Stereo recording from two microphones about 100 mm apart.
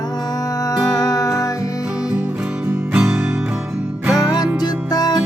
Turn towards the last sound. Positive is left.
turn(degrees=40)  # may be behind; listen again after turning